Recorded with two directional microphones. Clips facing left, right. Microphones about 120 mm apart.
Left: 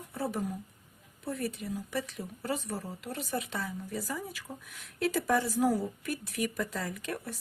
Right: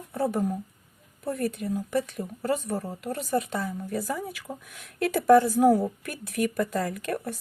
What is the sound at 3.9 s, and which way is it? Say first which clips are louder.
A woman's voice: right 6 dB; 60° right (ahead or behind).